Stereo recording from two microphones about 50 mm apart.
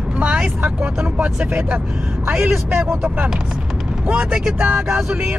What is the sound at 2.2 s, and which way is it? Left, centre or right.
Speech, right.